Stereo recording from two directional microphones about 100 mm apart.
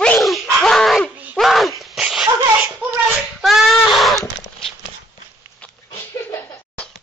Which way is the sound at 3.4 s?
Centre (ahead or behind).